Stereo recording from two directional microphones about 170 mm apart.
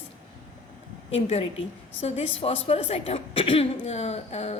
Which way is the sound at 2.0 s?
35° left (ahead or behind).